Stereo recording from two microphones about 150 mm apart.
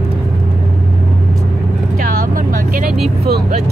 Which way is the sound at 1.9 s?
65° right (ahead or behind).